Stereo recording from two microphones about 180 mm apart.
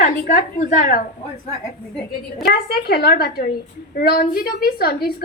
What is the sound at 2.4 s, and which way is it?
A woman's voice, 60° left (ahead or behind).